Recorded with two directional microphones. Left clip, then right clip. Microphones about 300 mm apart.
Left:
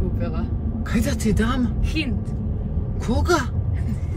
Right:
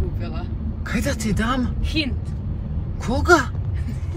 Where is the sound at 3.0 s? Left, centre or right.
Centre.